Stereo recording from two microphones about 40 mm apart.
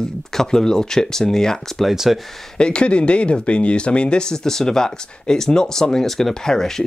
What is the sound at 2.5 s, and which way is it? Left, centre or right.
Speech, left.